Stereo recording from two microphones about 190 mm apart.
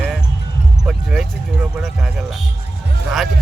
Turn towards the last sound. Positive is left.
turn(degrees=0)  # may be behind; listen again after turning